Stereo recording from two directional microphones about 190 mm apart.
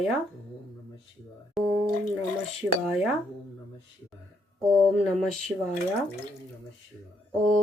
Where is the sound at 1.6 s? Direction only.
Centre (ahead or behind).